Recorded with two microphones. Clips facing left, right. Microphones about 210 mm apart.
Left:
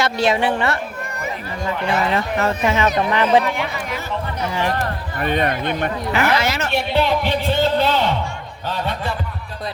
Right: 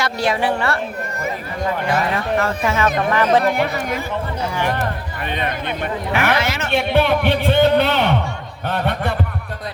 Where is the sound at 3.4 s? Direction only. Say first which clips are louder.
Right 5 dB; 45° right (ahead or behind).